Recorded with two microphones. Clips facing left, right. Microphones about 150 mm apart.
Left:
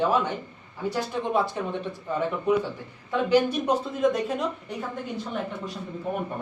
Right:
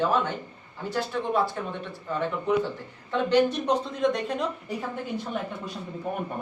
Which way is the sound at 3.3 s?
10° left (ahead or behind).